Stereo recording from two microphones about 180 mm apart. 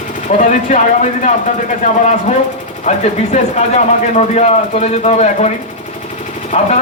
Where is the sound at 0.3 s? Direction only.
40° left (ahead or behind).